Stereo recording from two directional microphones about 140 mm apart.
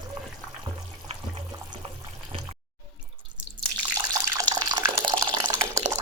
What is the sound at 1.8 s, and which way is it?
Water, 40° right (ahead or behind).